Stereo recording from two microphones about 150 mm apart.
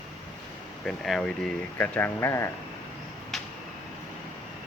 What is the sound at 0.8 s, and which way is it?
Speech, centre (ahead or behind).